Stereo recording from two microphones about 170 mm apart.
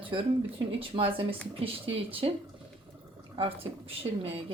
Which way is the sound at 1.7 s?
35° right (ahead or behind).